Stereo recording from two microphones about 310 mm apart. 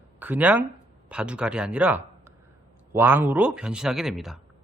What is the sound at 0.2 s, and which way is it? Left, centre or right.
Speech, centre.